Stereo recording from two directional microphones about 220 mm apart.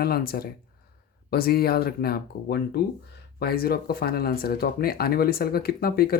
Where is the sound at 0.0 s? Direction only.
45° left (ahead or behind).